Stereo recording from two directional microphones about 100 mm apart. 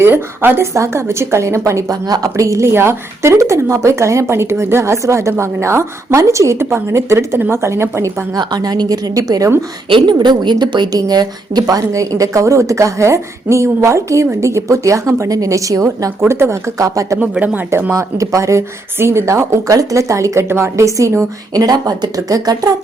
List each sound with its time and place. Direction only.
0.0 s a woman's voice: 20° right (ahead or behind)
8.4 s a woman's voice: 40° right (ahead or behind)
9.9 s a woman's voice: 50° right (ahead or behind)
17.4 s speech: 20° right (ahead or behind)
17.9 s a woman's voice: 30° right (ahead or behind)